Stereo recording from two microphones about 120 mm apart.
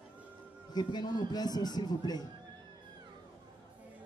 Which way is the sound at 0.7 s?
35° left (ahead or behind).